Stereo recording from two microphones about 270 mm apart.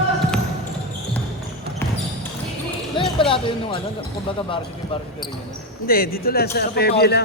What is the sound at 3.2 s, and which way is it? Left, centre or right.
Speech, centre.